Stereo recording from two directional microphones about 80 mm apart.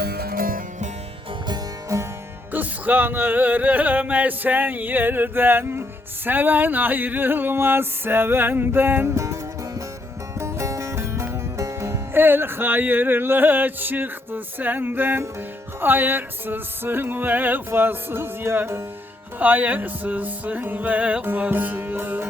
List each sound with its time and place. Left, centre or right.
1.9 s music: right
2.5 s music: right
19.4 s music: right